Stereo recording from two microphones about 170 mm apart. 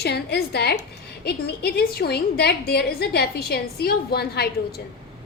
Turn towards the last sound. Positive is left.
turn(degrees=70)  # may be behind; listen again after turning